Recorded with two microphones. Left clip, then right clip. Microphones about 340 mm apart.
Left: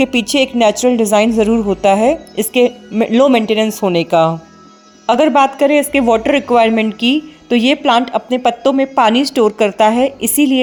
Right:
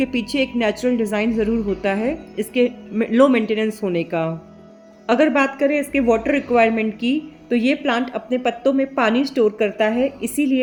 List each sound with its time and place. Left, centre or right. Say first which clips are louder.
0.6 s speech: left 8 dB; left